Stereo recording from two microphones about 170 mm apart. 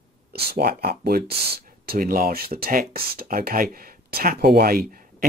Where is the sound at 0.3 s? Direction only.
70° right (ahead or behind).